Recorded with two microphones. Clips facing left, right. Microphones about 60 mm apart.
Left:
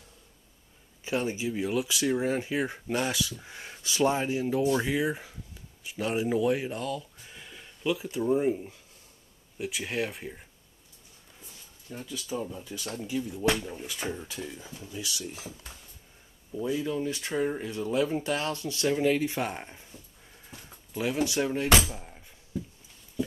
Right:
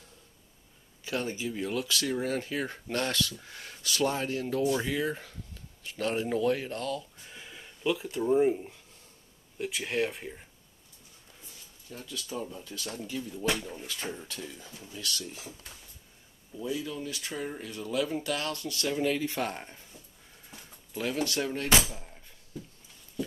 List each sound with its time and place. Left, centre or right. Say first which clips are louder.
1.0 s speech: left 3 dB; centre
11.9 s speech: left 3 dB; centre
16.5 s speech: left 5 dB; left